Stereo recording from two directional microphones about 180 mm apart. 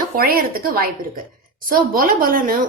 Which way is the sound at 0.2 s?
55° right (ahead or behind).